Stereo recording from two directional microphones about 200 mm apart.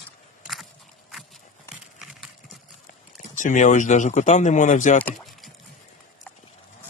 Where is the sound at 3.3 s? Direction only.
40° left (ahead or behind).